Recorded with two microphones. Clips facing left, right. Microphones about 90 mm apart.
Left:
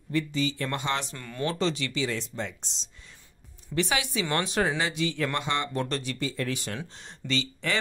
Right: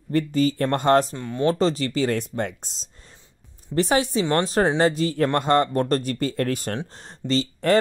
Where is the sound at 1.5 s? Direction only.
40° right (ahead or behind).